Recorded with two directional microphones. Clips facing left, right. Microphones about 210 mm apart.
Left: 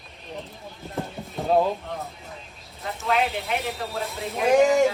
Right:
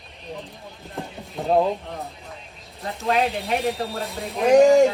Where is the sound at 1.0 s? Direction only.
Centre (ahead or behind).